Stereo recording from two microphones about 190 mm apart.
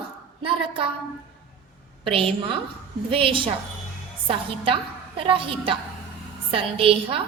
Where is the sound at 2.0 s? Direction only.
30° right (ahead or behind).